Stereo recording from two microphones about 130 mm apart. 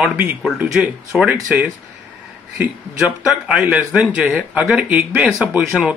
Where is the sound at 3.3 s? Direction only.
10° right (ahead or behind).